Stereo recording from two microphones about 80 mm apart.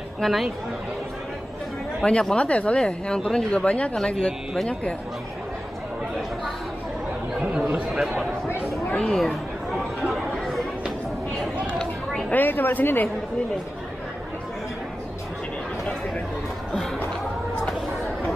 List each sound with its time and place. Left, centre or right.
0.2 s speech: centre
2.0 s speech: centre
7.3 s chatter: centre
8.9 s chatter: centre
11.8 s a sound: centre
12.4 s speech: left